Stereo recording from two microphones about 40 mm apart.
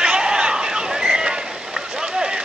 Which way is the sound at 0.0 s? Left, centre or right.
Centre.